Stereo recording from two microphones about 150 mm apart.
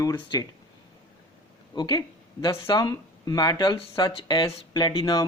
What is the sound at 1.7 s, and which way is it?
Speech, 30° left (ahead or behind).